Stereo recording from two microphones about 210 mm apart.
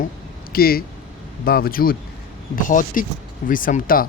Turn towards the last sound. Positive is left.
turn(degrees=40)  # may be behind; listen again after turning